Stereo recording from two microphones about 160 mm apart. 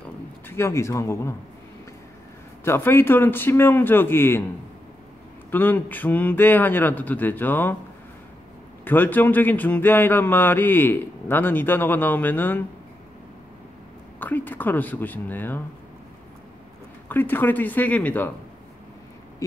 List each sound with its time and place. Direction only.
0.5 s a man's voice: 15° left (ahead or behind)
2.6 s a man's voice: 15° left (ahead or behind)
5.5 s a man's voice: 10° left (ahead or behind)
8.8 s a man's voice: 10° left (ahead or behind)
14.2 s a man's voice: 10° left (ahead or behind)
17.1 s a man's voice: 10° left (ahead or behind)